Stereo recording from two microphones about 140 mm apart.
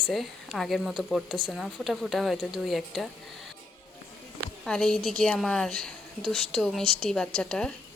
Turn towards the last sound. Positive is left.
turn(degrees=5)  # may be behind; listen again after turning